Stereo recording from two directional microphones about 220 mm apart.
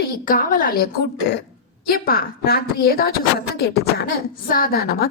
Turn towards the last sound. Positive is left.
turn(degrees=45)  # may be behind; listen again after turning